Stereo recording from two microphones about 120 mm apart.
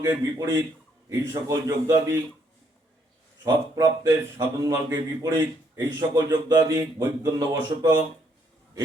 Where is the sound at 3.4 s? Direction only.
30° right (ahead or behind).